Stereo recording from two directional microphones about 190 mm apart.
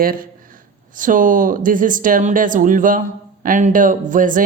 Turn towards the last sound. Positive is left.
turn(degrees=-45)  # may be behind; listen again after turning